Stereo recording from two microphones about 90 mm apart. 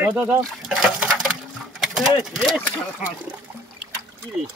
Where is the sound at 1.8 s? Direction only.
Centre (ahead or behind).